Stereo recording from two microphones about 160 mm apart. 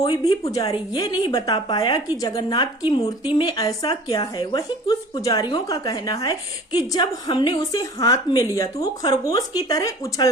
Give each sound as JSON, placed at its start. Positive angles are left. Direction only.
{"t": 0.3, "sound": "a woman's voice", "side_deg": 25}